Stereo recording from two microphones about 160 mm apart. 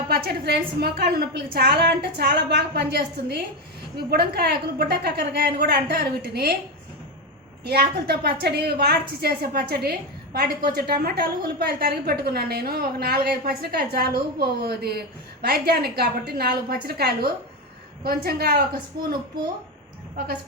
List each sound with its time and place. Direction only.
0.1 s a sound: 80° right
0.8 s a woman's voice: 85° right
7.6 s a woman's voice: 80° right